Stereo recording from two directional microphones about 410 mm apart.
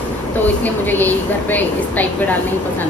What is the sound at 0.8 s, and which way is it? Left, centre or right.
A woman's voice, centre.